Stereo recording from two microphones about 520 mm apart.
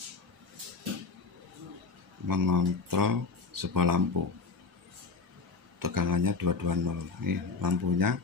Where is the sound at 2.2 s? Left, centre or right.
Right.